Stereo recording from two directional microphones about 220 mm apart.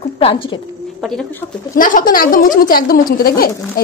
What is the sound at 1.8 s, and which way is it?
A woman's voice, 40° left (ahead or behind).